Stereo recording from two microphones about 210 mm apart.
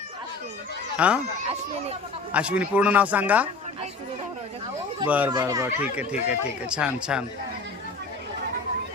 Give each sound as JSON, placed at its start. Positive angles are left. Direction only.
{"t": 0.9, "sound": "speech", "side_deg": -5}
{"t": 1.4, "sound": "speech", "side_deg": -30}
{"t": 2.3, "sound": "speech", "side_deg": -5}
{"t": 5.0, "sound": "speech", "side_deg": -5}
{"t": 5.3, "sound": "speech", "side_deg": -20}
{"t": 5.8, "sound": "speech", "side_deg": -5}